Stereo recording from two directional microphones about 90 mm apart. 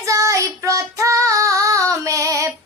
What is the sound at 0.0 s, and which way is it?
Child singing, 35° right (ahead or behind).